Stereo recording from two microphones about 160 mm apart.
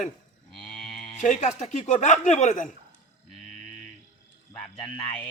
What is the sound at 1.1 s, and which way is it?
Speech, 50° left (ahead or behind).